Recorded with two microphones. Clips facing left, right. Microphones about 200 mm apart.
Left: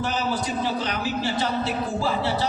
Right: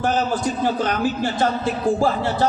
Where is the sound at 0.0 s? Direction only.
50° right (ahead or behind).